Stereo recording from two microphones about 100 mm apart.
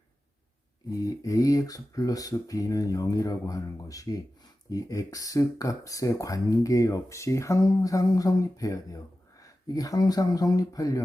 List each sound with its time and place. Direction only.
0.9 s speech: 35° left (ahead or behind)